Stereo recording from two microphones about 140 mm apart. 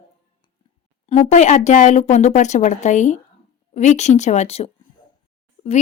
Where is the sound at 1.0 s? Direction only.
50° left (ahead or behind).